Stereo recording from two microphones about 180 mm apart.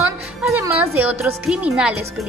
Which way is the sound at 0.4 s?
10° right (ahead or behind).